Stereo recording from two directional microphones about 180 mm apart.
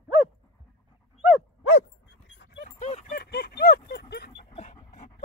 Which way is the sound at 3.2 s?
60° left (ahead or behind).